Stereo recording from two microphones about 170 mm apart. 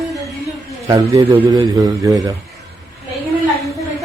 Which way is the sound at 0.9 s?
15° right (ahead or behind).